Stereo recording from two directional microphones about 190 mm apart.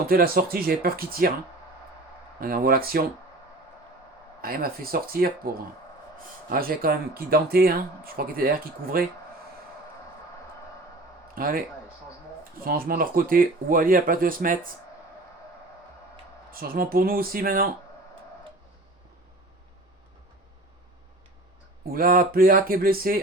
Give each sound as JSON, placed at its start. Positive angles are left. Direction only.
{"t": 0.1, "sound": "speech", "side_deg": -50}
{"t": 2.4, "sound": "speech", "side_deg": -50}
{"t": 4.4, "sound": "speech", "side_deg": -50}
{"t": 6.5, "sound": "speech", "side_deg": -50}
{"t": 11.3, "sound": "speech", "side_deg": -50}
{"t": 16.5, "sound": "speech", "side_deg": -50}
{"t": 21.8, "sound": "speech", "side_deg": -50}